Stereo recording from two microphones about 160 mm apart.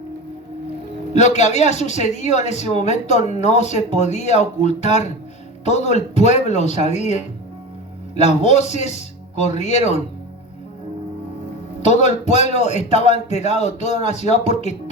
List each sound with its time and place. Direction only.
1.1 s a man's voice: 45° left (ahead or behind)
11.8 s a man's voice: 45° left (ahead or behind)